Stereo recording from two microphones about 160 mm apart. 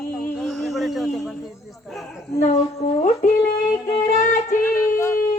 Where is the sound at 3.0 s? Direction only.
60° left (ahead or behind).